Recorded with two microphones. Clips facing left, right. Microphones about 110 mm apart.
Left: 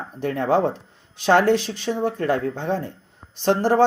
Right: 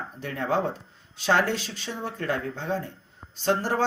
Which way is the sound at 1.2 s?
50° left (ahead or behind).